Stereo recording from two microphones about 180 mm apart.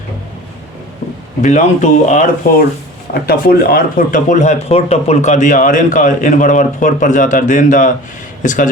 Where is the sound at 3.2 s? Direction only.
55° left (ahead or behind).